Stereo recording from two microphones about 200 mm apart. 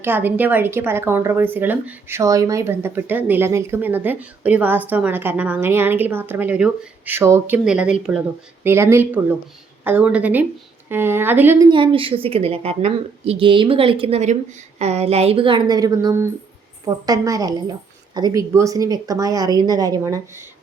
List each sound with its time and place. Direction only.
0.0 s a woman's voice: 10° right (ahead or behind)
11.7 s a woman's voice: 25° right (ahead or behind)